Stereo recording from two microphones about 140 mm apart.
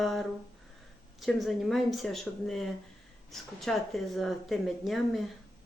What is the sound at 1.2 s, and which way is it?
Speech, centre (ahead or behind).